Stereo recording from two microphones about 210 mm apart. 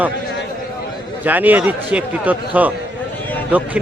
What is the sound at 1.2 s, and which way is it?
A man's voice, 10° right (ahead or behind).